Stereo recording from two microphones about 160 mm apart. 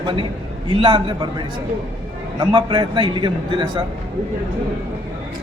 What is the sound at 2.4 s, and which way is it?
A man's voice, 30° right (ahead or behind).